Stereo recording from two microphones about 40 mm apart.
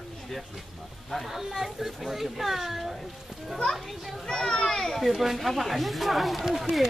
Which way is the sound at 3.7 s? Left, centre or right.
Centre.